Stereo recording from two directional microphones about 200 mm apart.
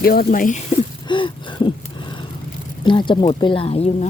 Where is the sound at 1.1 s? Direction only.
25° left (ahead or behind).